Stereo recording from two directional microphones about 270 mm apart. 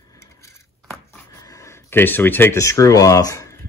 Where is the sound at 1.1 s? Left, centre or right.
Centre.